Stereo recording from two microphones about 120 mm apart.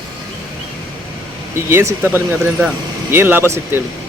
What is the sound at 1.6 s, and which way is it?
Speech, 20° right (ahead or behind).